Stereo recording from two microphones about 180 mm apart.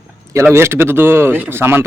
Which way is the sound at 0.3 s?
15° right (ahead or behind).